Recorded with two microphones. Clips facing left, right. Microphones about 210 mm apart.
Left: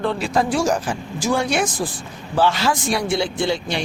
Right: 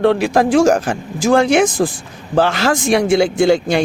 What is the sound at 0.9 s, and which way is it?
Speech, 60° right (ahead or behind).